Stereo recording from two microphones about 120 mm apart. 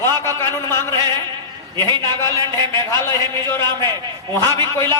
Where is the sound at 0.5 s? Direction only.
20° left (ahead or behind).